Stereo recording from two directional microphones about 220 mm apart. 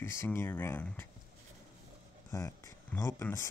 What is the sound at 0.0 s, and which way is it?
Speech, 10° left (ahead or behind).